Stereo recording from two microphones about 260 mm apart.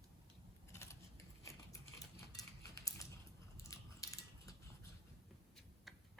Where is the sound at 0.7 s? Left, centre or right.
Centre.